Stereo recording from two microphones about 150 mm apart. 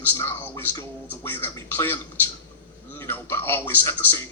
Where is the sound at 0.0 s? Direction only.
15° left (ahead or behind).